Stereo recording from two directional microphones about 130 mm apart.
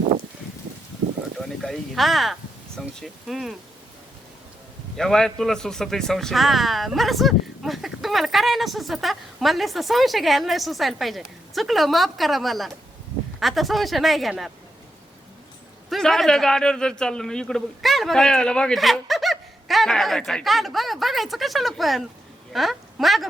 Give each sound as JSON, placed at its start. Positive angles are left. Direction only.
{"t": 1.4, "sound": "speech", "side_deg": 0}
{"t": 4.9, "sound": "speech", "side_deg": 5}
{"t": 15.9, "sound": "a woman's voice", "side_deg": 0}